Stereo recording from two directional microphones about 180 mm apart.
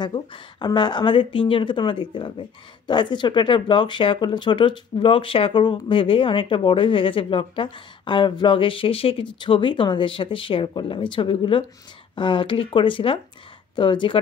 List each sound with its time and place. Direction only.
0.0 s speech: 25° left (ahead or behind)